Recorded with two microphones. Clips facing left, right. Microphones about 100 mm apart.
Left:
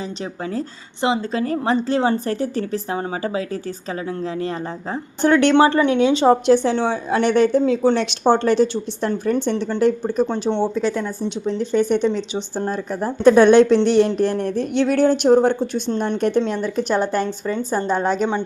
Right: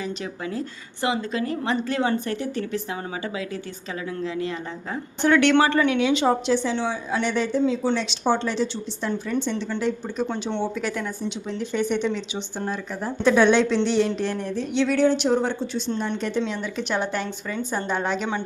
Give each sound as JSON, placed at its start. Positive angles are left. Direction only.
{"t": 1.0, "sound": "a woman's voice", "side_deg": 30}
{"t": 6.5, "sound": "speech", "side_deg": 50}
{"t": 10.2, "sound": "a woman's voice", "side_deg": 30}
{"t": 16.5, "sound": "a woman's voice", "side_deg": 40}